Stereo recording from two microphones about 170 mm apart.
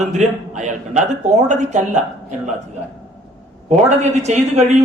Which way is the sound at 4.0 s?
40° right (ahead or behind).